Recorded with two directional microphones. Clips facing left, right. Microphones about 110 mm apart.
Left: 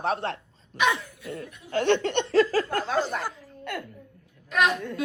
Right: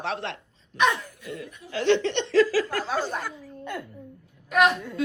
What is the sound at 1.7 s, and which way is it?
Speech, 50° left (ahead or behind).